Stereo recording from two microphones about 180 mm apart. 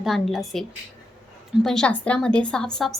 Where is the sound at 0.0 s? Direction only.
Centre (ahead or behind).